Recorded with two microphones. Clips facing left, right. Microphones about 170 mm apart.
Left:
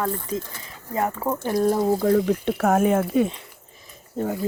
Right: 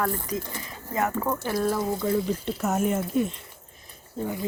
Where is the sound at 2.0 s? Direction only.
65° left (ahead or behind).